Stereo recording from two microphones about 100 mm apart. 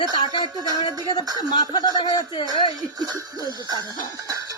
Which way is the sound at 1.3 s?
45° left (ahead or behind).